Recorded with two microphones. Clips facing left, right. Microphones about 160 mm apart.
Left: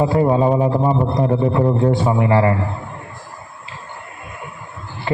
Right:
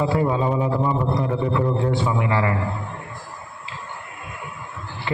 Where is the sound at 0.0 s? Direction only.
35° left (ahead or behind).